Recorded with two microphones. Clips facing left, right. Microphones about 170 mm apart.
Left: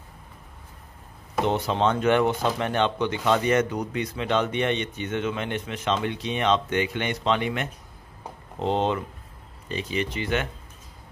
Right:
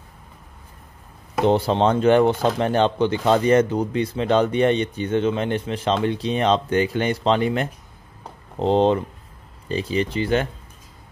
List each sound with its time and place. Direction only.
1.4 s speech: 35° right (ahead or behind)